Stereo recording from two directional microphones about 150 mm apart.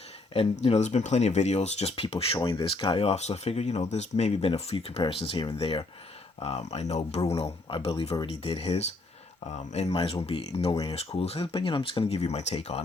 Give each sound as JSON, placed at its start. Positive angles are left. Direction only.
{"t": 0.3, "sound": "speech", "side_deg": 45}